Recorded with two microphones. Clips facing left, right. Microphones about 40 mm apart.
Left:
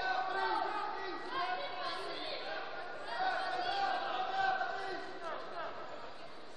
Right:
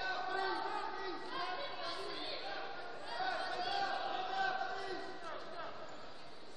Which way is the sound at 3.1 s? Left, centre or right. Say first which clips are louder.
Left 4 dB; centre.